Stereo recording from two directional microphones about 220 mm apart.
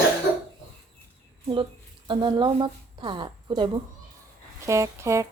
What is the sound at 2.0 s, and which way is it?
Speech, 20° right (ahead or behind).